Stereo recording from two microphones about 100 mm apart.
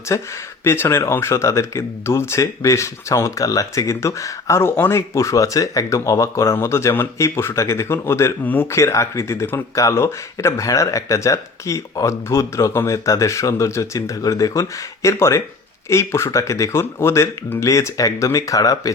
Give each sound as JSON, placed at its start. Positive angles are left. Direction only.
{"t": 0.1, "sound": "speech", "side_deg": 35}